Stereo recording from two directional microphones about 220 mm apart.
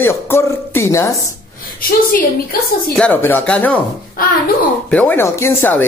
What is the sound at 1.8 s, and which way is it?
Speech, 40° left (ahead or behind).